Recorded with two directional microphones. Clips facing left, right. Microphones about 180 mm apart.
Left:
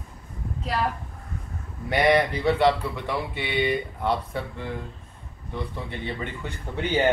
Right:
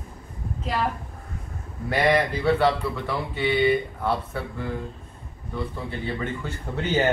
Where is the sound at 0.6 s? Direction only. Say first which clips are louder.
Even; centre (ahead or behind).